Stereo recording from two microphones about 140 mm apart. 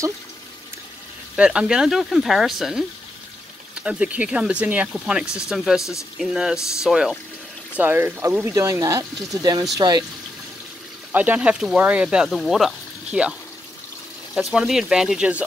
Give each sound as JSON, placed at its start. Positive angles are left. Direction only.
{"t": 1.3, "sound": "speech", "side_deg": -10}
{"t": 11.1, "sound": "speech", "side_deg": -10}
{"t": 14.3, "sound": "speech", "side_deg": -5}